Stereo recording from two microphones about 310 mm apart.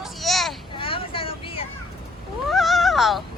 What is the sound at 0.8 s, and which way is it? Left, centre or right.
Vehicle, centre.